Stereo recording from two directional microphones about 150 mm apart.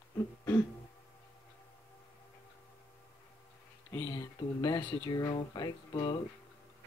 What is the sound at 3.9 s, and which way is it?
Speech, 25° left (ahead or behind).